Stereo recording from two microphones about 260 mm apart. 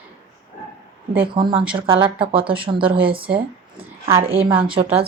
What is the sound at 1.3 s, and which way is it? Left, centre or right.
Speech, centre.